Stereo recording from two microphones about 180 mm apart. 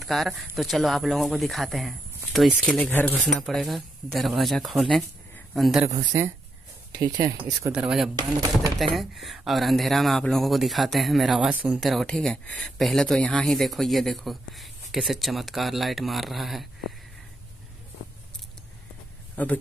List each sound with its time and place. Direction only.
0.0 s speech: centre (ahead or behind)
5.9 s speech: 15° right (ahead or behind)
7.7 s speech: 5° right (ahead or behind)